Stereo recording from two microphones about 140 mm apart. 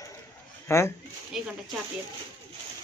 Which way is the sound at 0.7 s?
20° left (ahead or behind).